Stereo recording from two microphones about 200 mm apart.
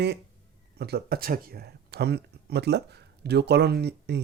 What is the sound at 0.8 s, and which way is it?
Speech, 50° right (ahead or behind).